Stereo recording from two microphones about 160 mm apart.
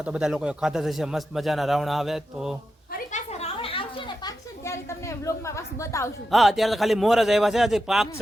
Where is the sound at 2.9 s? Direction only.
50° left (ahead or behind).